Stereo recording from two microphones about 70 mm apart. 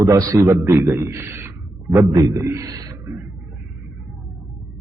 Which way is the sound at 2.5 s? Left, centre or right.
Right.